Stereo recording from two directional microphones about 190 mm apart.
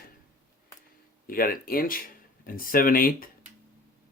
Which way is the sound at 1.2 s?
50° left (ahead or behind).